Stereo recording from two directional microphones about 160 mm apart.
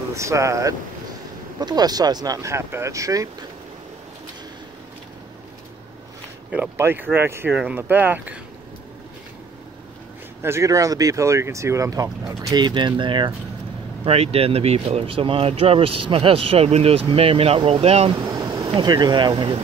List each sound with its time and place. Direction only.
0.1 s speech: 20° right (ahead or behind)
6.5 s speech: 10° right (ahead or behind)
10.4 s speech: 15° right (ahead or behind)
14.0 s speech: 40° right (ahead or behind)
18.1 s vehicle: 20° right (ahead or behind)
18.7 s speech: 25° right (ahead or behind)